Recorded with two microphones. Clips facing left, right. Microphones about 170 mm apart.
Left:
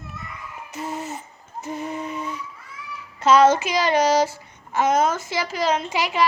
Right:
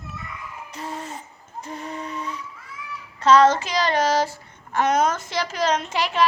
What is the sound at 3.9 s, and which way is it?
Speech, 15° left (ahead or behind).